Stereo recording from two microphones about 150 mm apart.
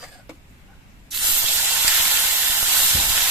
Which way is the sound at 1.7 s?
10° right (ahead or behind).